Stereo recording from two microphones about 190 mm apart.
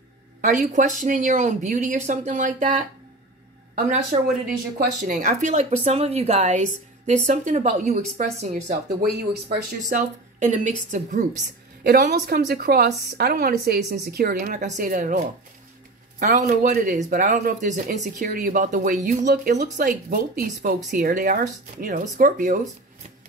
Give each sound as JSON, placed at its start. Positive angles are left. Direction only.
{"t": 0.4, "sound": "speech", "side_deg": -40}
{"t": 4.7, "sound": "speech", "side_deg": -45}
{"t": 8.6, "sound": "a woman's voice", "side_deg": -55}
{"t": 9.8, "sound": "speech", "side_deg": -40}
{"t": 11.8, "sound": "a woman's voice", "side_deg": -55}